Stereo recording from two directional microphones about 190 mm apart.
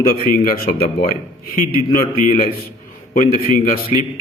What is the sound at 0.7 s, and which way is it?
Speech, 55° left (ahead or behind).